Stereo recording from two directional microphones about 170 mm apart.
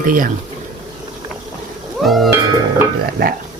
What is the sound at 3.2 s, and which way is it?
Speech, 65° right (ahead or behind).